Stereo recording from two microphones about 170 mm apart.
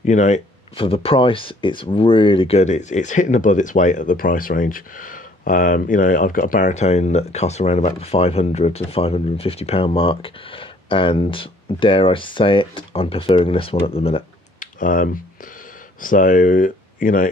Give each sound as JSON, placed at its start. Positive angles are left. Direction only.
{"t": 0.0, "sound": "speech", "side_deg": 45}
{"t": 0.7, "sound": "speech", "side_deg": 30}
{"t": 14.6, "sound": "computer keyboard", "side_deg": 50}
{"t": 16.0, "sound": "speech", "side_deg": 50}